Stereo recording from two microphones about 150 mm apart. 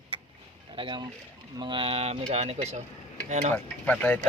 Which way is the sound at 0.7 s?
35° right (ahead or behind).